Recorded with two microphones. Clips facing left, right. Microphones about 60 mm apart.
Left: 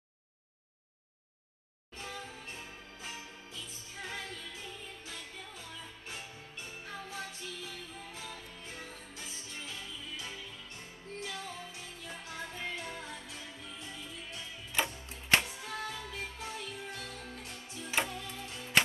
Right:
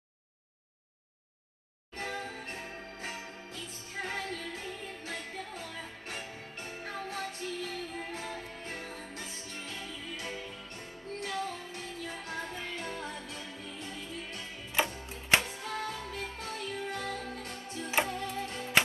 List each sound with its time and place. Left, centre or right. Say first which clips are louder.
2.0 s music: right 6 dB; right
15.6 s music: right 3 dB; right